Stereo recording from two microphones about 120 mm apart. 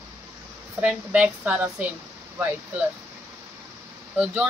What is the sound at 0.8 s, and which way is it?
Speech, 10° right (ahead or behind).